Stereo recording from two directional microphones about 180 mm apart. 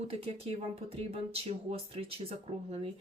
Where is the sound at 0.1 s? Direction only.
35° right (ahead or behind).